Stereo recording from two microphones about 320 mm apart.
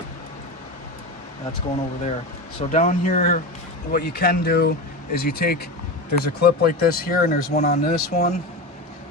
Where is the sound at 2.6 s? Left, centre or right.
Left.